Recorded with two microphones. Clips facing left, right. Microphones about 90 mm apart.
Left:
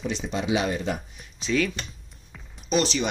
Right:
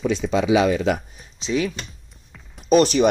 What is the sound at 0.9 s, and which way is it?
Speech, 90° right.